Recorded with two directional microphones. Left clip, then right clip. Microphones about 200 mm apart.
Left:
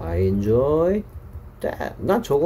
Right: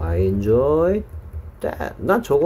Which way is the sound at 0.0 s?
10° right (ahead or behind).